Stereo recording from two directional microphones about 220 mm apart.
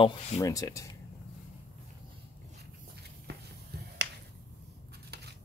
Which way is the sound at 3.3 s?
50° right (ahead or behind).